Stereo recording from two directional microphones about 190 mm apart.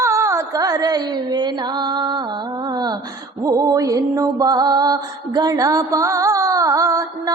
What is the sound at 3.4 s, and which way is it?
Music, 20° right (ahead or behind).